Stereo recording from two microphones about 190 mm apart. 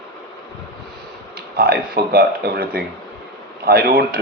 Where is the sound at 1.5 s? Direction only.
50° right (ahead or behind).